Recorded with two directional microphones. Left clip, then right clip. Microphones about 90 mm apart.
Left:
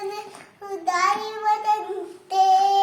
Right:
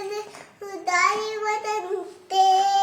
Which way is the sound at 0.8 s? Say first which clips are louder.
Even; 30° right (ahead or behind).